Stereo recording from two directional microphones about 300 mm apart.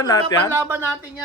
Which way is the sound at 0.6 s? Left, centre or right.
Centre.